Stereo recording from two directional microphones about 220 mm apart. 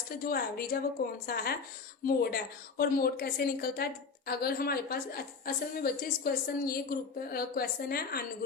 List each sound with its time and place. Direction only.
0.3 s a woman's voice: 45° left (ahead or behind)